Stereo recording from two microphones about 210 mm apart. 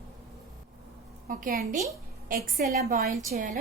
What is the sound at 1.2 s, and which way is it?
A woman's voice, 40° right (ahead or behind).